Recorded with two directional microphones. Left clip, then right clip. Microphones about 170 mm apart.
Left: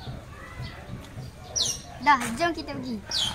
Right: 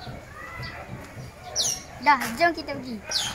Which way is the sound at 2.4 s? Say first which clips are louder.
Right 4 dB; 5° right (ahead or behind).